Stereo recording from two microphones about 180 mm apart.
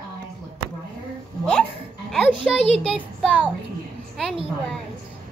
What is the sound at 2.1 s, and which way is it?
A child's voice, 5° left (ahead or behind).